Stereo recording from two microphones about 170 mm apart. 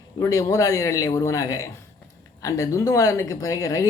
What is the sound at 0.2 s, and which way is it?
A man's voice, 20° left (ahead or behind).